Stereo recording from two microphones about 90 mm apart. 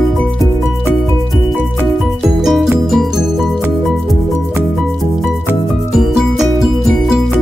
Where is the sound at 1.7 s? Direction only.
5° left (ahead or behind).